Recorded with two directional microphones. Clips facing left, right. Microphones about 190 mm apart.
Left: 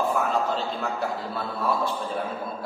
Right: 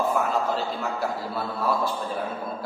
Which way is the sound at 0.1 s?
Centre (ahead or behind).